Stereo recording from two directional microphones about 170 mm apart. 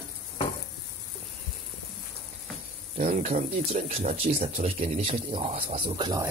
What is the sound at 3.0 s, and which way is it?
Speech, 40° right (ahead or behind).